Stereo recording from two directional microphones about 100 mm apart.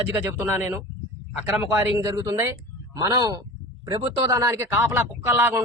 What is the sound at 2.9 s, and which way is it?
Speech, 40° right (ahead or behind).